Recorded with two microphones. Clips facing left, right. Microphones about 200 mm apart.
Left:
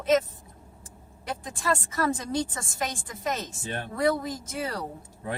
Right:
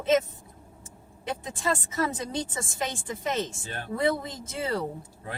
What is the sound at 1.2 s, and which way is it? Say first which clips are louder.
A woman's voice: even; 25° right (ahead or behind).